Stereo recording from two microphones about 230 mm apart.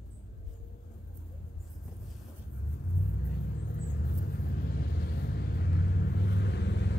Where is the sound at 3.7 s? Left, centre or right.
Left.